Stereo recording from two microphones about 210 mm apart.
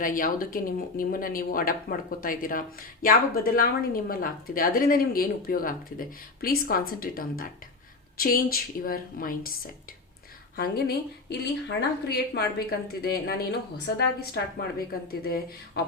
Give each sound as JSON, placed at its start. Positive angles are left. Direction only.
{"t": 0.0, "sound": "speech", "side_deg": 40}
{"t": 10.6, "sound": "speech", "side_deg": 50}